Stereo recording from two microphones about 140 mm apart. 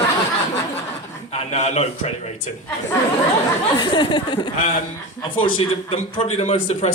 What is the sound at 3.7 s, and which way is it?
Speech, 30° left (ahead or behind).